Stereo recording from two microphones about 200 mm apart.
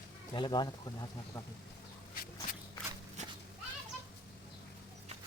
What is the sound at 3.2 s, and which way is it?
Children playing, 35° right (ahead or behind).